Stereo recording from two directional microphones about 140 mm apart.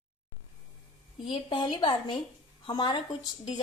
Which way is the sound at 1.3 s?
40° left (ahead or behind).